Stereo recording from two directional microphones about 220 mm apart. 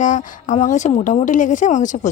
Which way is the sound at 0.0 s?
35° left (ahead or behind).